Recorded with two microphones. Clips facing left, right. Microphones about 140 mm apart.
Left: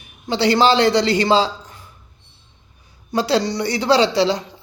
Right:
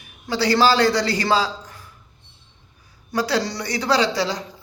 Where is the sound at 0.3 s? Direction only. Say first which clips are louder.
Left 2 dB; 25° left (ahead or behind).